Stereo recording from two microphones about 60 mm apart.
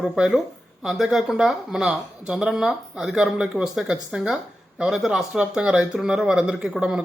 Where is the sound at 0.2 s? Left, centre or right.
Centre.